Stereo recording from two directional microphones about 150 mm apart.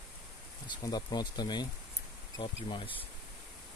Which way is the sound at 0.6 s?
30° left (ahead or behind).